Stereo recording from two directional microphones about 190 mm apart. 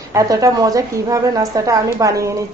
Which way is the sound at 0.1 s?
15° right (ahead or behind).